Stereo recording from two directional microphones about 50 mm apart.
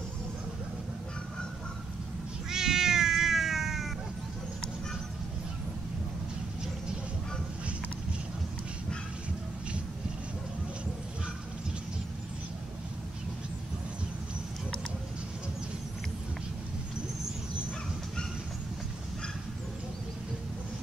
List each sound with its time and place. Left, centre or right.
2.5 s cat: centre